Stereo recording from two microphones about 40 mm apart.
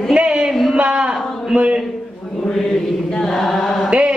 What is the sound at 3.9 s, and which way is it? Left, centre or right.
Mantra, right.